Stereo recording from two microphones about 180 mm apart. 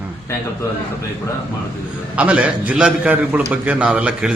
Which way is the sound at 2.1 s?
5° right (ahead or behind).